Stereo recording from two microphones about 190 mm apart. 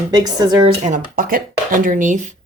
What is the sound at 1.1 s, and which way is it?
Speech, 50° right (ahead or behind).